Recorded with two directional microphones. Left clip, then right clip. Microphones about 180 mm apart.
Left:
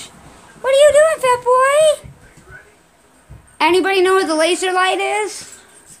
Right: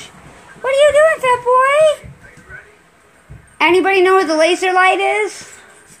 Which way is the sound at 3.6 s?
10° left (ahead or behind).